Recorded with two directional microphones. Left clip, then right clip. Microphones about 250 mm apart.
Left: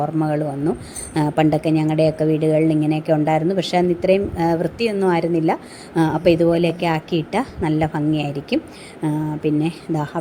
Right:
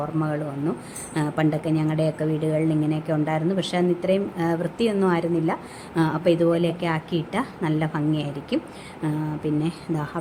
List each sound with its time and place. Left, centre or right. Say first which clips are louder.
0.2 s a woman's voice: left 6 dB; centre